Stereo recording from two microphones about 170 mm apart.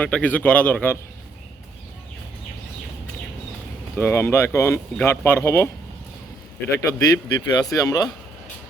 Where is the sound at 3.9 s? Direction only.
15° left (ahead or behind).